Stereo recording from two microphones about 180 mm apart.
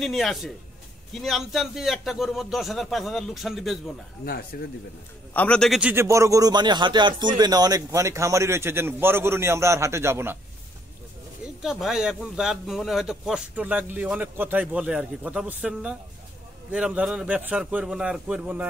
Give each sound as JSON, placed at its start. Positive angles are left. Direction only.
{"t": 0.0, "sound": "a man's voice", "side_deg": 0}
{"t": 4.2, "sound": "speech", "side_deg": 60}
{"t": 5.3, "sound": "a man's voice", "side_deg": 5}
{"t": 11.4, "sound": "a man's voice", "side_deg": -5}